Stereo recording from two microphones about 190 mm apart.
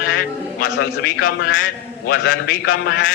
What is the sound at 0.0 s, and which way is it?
A man's voice, 50° left (ahead or behind).